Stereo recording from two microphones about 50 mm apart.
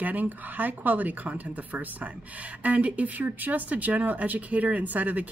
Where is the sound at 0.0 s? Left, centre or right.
Right.